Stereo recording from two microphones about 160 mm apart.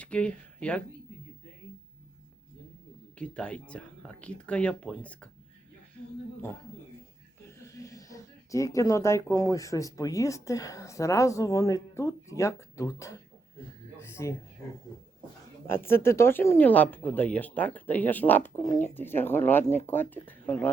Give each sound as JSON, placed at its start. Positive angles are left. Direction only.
{"t": 0.0, "sound": "speech", "side_deg": 5}
{"t": 3.2, "sound": "speech", "side_deg": 5}
{"t": 7.6, "sound": "speech", "side_deg": 20}
{"t": 15.6, "sound": "speech", "side_deg": 15}